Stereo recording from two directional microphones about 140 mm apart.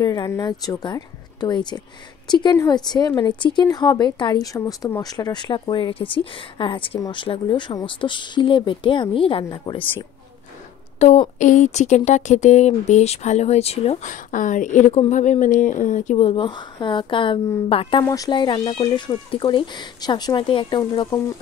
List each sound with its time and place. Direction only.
0.0 s a woman's voice: 25° left (ahead or behind)
11.0 s speech: 55° left (ahead or behind)
18.0 s a woman's voice: 25° left (ahead or behind)